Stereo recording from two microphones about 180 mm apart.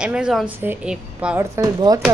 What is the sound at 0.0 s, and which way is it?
Speech, 5° right (ahead or behind).